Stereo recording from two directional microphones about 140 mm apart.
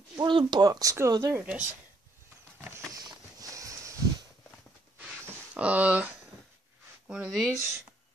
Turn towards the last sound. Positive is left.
turn(degrees=-5)  # may be behind; listen again after turning